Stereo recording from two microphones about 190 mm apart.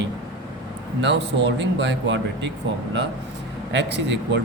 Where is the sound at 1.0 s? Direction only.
65° right (ahead or behind).